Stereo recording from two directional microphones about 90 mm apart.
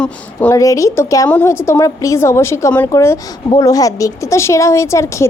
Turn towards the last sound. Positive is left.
turn(degrees=35)  # may be behind; listen again after turning